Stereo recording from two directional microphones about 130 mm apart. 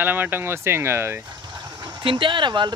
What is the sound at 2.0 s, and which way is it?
Speech, 40° right (ahead or behind).